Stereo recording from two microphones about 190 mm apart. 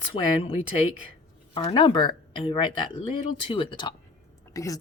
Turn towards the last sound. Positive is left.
turn(degrees=15)  # may be behind; listen again after turning